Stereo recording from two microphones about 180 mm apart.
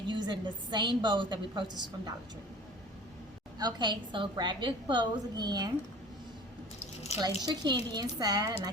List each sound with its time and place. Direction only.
0.1 s a woman's voice: 25° right (ahead or behind)
3.6 s a woman's voice: 25° right (ahead or behind)
7.2 s a woman's voice: 20° right (ahead or behind)